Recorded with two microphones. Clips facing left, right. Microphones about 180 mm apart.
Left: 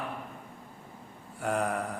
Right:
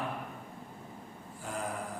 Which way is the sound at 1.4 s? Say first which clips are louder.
Left 8 dB; 70° left (ahead or behind).